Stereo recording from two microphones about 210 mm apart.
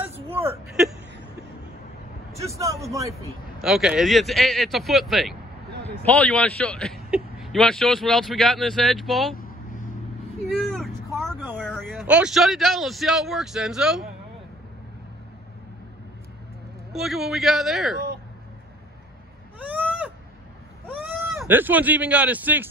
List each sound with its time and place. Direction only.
0.1 s a sound: 10° right (ahead or behind)
2.5 s a man's voice: 15° right (ahead or behind)
3.6 s speech: 5° right (ahead or behind)
9.4 s vehicle: 40° left (ahead or behind)
10.4 s vehicle: centre (ahead or behind)
11.1 s speech: 5° left (ahead or behind)
16.9 s speech: centre (ahead or behind)
19.6 s a sound: 5° right (ahead or behind)
20.9 s speech: 10° right (ahead or behind)